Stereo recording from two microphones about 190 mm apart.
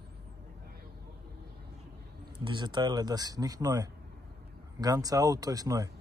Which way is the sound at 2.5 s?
25° right (ahead or behind).